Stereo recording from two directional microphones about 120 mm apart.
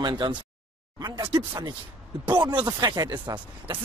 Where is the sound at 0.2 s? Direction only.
40° right (ahead or behind).